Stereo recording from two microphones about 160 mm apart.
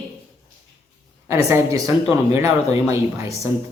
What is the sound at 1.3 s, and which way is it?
Speech, 20° right (ahead or behind).